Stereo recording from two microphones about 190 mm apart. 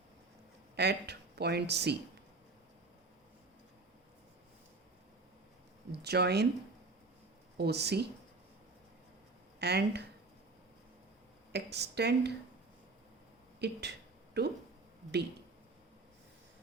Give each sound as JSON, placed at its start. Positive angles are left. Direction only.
{"t": 0.8, "sound": "speech", "side_deg": -60}
{"t": 5.9, "sound": "speech", "side_deg": -60}
{"t": 7.6, "sound": "speech", "side_deg": -60}
{"t": 9.6, "sound": "speech", "side_deg": -60}
{"t": 11.5, "sound": "speech", "side_deg": -60}
{"t": 13.6, "sound": "speech", "side_deg": -60}